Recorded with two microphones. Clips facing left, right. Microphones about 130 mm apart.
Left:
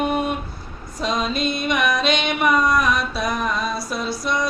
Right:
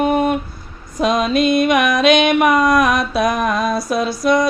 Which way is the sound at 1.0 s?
55° right (ahead or behind).